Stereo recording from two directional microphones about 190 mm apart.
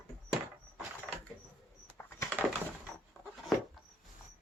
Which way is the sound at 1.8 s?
10° left (ahead or behind).